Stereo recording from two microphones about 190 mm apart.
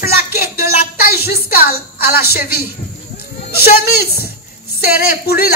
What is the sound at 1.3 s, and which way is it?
A woman's voice, 50° left (ahead or behind).